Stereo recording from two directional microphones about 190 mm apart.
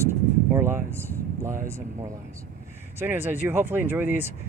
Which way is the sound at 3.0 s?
10° right (ahead or behind).